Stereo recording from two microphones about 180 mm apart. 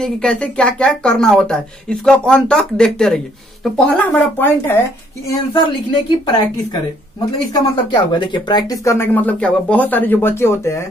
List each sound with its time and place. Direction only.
0.0 s speech: 5° left (ahead or behind)
6.0 s a woman's voice: 25° left (ahead or behind)